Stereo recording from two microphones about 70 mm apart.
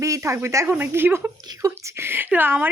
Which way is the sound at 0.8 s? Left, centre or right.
Right.